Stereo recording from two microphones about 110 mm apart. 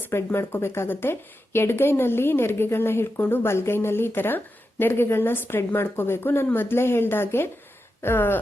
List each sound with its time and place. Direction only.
0.0 s speech: 20° left (ahead or behind)